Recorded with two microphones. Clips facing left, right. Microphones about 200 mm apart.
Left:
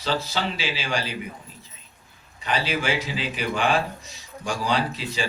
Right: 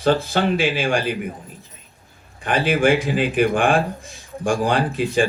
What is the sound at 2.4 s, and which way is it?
A man's voice, 55° right (ahead or behind).